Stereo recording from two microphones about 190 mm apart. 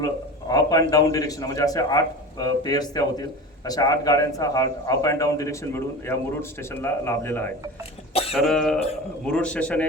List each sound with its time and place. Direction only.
0.0 s a man's voice: 20° left (ahead or behind)
8.3 s a man's voice: centre (ahead or behind)